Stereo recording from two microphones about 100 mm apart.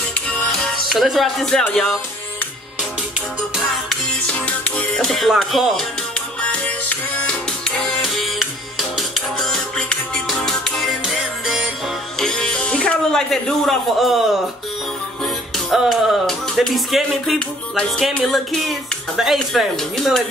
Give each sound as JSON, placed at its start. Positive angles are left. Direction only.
{"t": 0.1, "sound": "music", "side_deg": 5}
{"t": 1.6, "sound": "speech", "side_deg": 5}
{"t": 3.2, "sound": "speech", "side_deg": -5}
{"t": 4.3, "sound": "speech", "side_deg": 15}
{"t": 6.4, "sound": "music", "side_deg": 15}
{"t": 15.2, "sound": "music", "side_deg": 0}
{"t": 17.7, "sound": "speech", "side_deg": 10}